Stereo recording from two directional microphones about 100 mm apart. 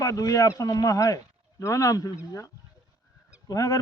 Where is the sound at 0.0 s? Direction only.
35° left (ahead or behind).